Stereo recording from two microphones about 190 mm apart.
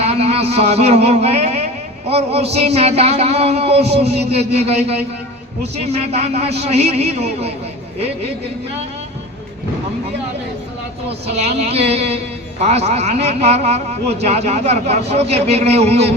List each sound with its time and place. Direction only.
0.0 s a man's voice: 35° right (ahead or behind)
11.3 s a man's voice: 35° right (ahead or behind)